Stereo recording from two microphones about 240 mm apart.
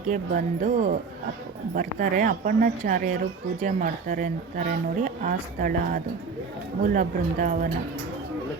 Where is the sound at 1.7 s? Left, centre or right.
Right.